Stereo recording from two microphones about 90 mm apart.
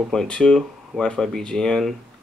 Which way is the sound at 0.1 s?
5° left (ahead or behind).